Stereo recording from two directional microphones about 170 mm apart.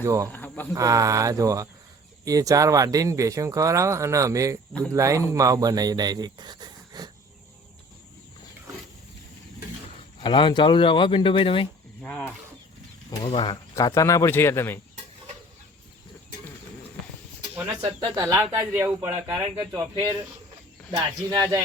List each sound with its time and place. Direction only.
0.0 s speech: 20° right (ahead or behind)
0.3 s cricket: 10° left (ahead or behind)
0.7 s speech: 20° right (ahead or behind)
10.2 s speech: 30° left (ahead or behind)
12.0 s speech: 5° left (ahead or behind)
13.1 s speech: 30° left (ahead or behind)
13.7 s speech: 20° left (ahead or behind)
18.4 s speech: 5° right (ahead or behind)
19.5 s speech: 25° right (ahead or behind)